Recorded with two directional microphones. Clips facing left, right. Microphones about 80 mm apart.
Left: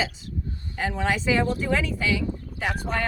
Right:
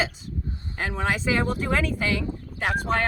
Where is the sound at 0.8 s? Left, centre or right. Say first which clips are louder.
Left 1 dB; right.